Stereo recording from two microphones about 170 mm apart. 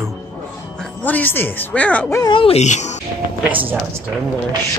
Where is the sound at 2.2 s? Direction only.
30° left (ahead or behind).